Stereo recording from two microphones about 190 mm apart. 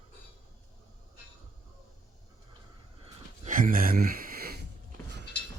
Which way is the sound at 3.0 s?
45° right (ahead or behind).